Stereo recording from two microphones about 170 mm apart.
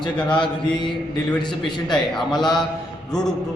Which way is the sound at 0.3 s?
30° left (ahead or behind).